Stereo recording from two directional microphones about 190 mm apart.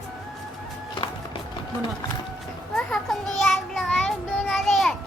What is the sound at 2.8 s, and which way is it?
Child singing, centre (ahead or behind).